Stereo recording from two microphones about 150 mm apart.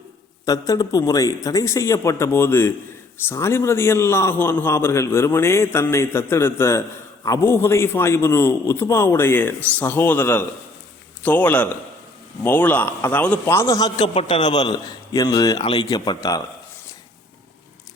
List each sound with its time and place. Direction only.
0.4 s a man's voice: 25° left (ahead or behind)